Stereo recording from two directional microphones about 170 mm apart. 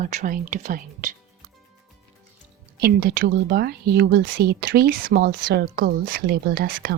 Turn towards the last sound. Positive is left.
turn(degrees=-60)  # may be behind; listen again after turning